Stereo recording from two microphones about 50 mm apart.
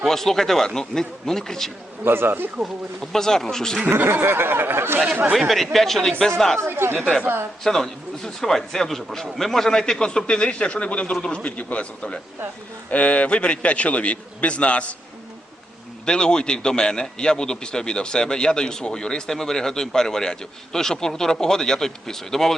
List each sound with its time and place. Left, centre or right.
0.0 s a man's voice: centre
2.0 s speech: right
3.0 s a man's voice: centre
3.8 s speech: right
5.0 s speech: right
5.5 s a man's voice: centre
6.7 s speech: right
7.6 s a man's voice: centre; by 14.9 s left
16.0 s a man's voice: centre